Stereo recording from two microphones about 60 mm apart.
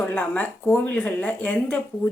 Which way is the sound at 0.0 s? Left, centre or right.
Left.